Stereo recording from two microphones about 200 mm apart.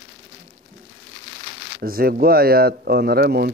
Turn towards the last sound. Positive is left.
turn(degrees=-50)  # may be behind; listen again after turning